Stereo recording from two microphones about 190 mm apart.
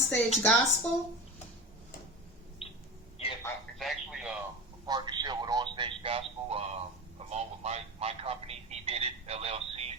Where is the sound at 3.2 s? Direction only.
30° left (ahead or behind).